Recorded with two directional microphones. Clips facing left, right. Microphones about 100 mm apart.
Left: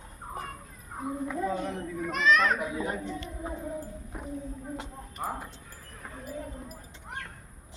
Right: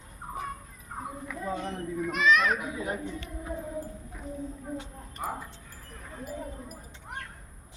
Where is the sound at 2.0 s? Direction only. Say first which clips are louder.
Even; 10° right (ahead or behind).